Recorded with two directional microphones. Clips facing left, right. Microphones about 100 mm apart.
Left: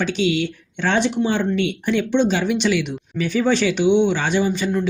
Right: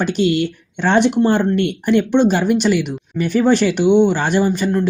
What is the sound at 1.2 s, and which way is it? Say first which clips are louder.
Speech: right 5 dB; 45° right (ahead or behind).